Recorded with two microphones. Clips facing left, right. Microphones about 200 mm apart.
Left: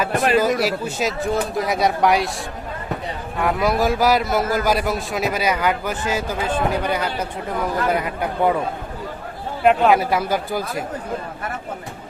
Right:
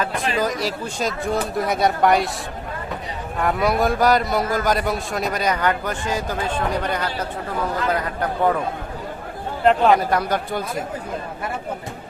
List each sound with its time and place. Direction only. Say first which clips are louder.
0.1 s speech: left 6 dB; 55° left (ahead or behind)
0.3 s a man's voice: left 3 dB; 5° left (ahead or behind)
3.4 s a man's voice: left 1 dB; centre (ahead or behind)
9.6 s a man's voice: left 1 dB; 5° left (ahead or behind)